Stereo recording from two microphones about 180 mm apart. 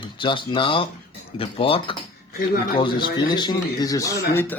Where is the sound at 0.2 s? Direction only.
25° left (ahead or behind).